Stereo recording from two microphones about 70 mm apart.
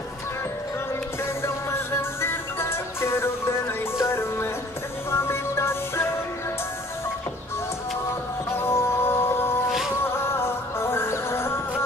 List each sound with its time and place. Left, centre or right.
1.4 s music: left
8.5 s music: left